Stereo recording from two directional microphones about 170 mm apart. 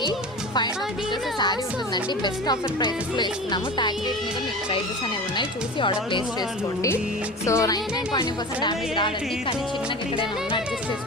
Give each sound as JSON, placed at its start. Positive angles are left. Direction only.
{"t": 2.2, "sound": "a woman's voice", "side_deg": 25}
{"t": 5.4, "sound": "a woman's voice", "side_deg": 30}
{"t": 7.4, "sound": "a woman's voice", "side_deg": 20}